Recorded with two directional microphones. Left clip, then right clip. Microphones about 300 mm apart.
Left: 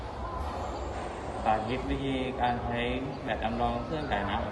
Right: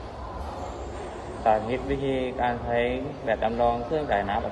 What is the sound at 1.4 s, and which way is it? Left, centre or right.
A man's voice, centre.